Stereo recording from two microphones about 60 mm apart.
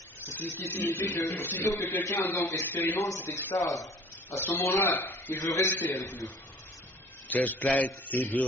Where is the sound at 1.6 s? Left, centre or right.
Left.